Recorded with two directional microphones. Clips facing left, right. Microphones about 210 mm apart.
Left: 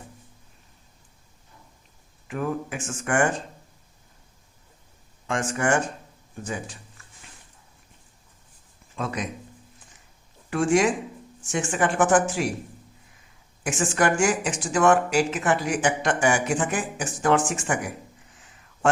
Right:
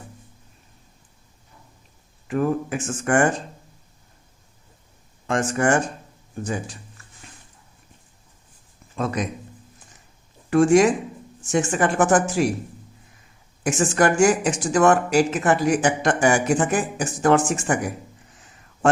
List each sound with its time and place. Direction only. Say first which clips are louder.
2.2 s speech: right 6 dB; 40° right (ahead or behind)
5.3 s speech: right 4 dB; 40° right (ahead or behind)
9.0 s speech: right 5 dB; 40° right (ahead or behind)
10.5 s speech: right 6 dB; 40° right (ahead or behind)
13.7 s speech: right 4 dB; 40° right (ahead or behind)